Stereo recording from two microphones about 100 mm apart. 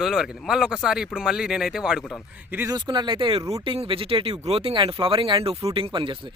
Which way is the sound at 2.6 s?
45° right (ahead or behind).